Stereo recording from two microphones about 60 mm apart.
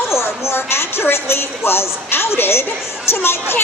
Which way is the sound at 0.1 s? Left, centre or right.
Left.